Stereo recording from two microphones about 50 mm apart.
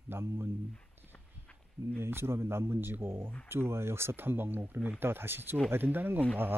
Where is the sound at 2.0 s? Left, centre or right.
Right.